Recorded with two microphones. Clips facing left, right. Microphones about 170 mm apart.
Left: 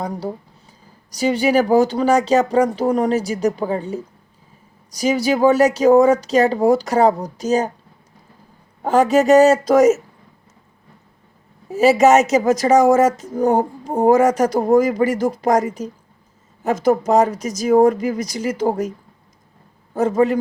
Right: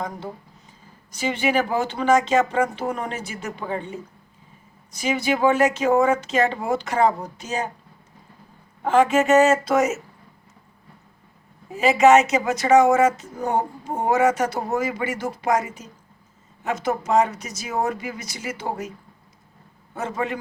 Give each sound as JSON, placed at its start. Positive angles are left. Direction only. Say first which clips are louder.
{"t": 1.1, "sound": "speech", "louder": "left 6 dB", "side_deg": 40}
{"t": 8.8, "sound": "speech", "louder": "left 3 dB", "side_deg": 40}
{"t": 11.7, "sound": "speech", "louder": "left 3 dB", "side_deg": 40}